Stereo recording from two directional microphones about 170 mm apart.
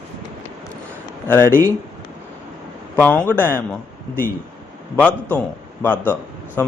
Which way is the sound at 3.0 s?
10° left (ahead or behind).